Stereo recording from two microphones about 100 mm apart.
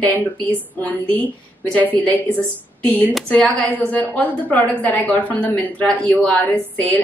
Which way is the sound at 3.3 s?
15° left (ahead or behind).